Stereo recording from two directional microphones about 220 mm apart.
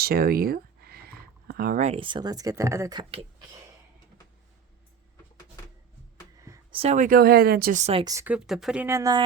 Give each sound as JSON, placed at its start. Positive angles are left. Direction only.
{"t": 0.0, "sound": "speech", "side_deg": -45}
{"t": 6.4, "sound": "a sound", "side_deg": -15}
{"t": 6.7, "sound": "speech", "side_deg": -30}
{"t": 8.0, "sound": "speech", "side_deg": -10}